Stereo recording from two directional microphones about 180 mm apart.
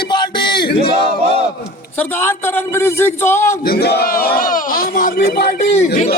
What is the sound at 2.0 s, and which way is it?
A man's voice, 10° left (ahead or behind).